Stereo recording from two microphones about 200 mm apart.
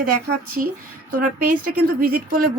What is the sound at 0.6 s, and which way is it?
Speech, 40° right (ahead or behind).